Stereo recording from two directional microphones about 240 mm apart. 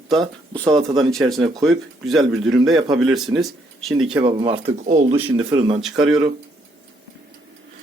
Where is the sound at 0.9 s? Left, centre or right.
Centre.